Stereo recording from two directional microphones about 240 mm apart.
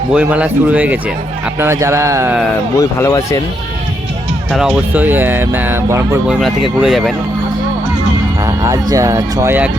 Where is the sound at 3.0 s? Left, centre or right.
Centre.